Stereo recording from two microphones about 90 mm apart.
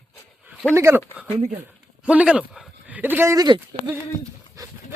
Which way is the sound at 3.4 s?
55° right (ahead or behind).